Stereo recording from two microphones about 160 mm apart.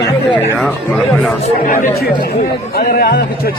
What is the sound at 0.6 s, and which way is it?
Speech, 5° left (ahead or behind).